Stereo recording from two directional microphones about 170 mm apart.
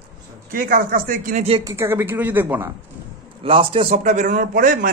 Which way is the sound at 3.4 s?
30° right (ahead or behind).